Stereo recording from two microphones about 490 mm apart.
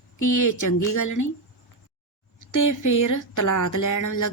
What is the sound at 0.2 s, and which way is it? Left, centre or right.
Speech, left.